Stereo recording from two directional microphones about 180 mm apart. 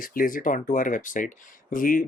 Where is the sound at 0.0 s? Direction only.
50° left (ahead or behind).